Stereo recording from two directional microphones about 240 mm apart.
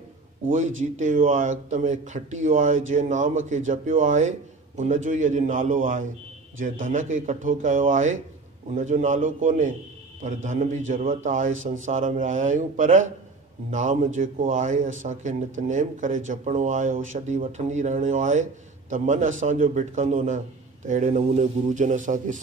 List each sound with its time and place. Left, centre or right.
0.9 s a man's voice: right